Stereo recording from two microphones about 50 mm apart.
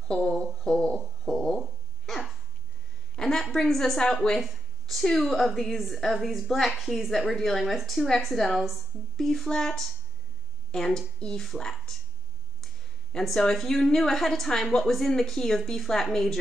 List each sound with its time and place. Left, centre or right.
0.1 s speech: centre
0.7 s a sound: centre
3.2 s a sound: centre
4.0 s speech: centre
4.4 s a woman's voice: centre
13.1 s speech: centre